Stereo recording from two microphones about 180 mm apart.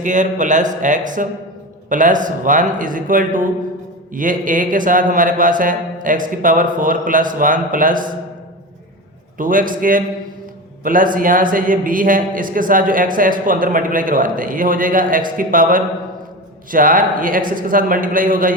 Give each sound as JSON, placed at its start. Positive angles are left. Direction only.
{"t": 0.0, "sound": "speech", "side_deg": -45}
{"t": 9.4, "sound": "speech", "side_deg": -50}